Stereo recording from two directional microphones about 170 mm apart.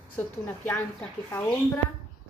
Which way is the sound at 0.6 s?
10° left (ahead or behind).